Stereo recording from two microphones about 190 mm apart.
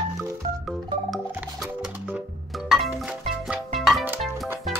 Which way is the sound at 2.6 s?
Centre (ahead or behind).